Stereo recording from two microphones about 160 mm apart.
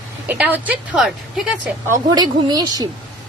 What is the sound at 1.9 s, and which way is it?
A woman's voice, 25° right (ahead or behind).